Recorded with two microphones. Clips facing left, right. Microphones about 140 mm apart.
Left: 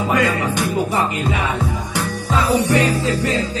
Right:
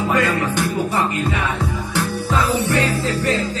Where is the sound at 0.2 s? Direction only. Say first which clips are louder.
Even; 15° left (ahead or behind).